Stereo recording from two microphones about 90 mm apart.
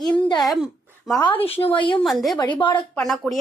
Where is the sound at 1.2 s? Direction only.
75° left (ahead or behind).